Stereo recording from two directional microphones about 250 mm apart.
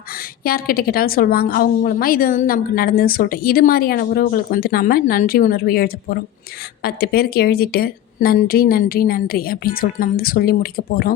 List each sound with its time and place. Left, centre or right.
0.1 s a woman's voice: left